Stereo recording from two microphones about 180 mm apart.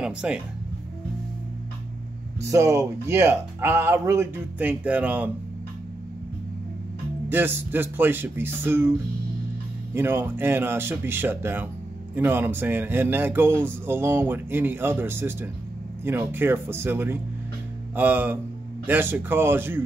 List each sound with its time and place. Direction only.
0.0 s speech: 5° right (ahead or behind)
2.4 s speech: 15° right (ahead or behind)
7.2 s speech: 10° right (ahead or behind)
9.9 s speech: 10° right (ahead or behind)